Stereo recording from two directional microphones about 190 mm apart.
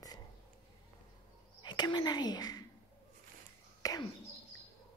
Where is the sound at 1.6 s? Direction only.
20° left (ahead or behind).